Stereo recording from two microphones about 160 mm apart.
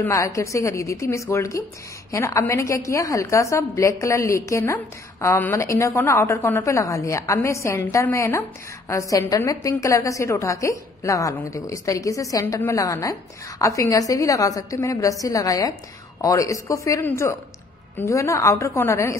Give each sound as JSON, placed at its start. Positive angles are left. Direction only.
{"t": 0.0, "sound": "a woman's voice", "side_deg": 20}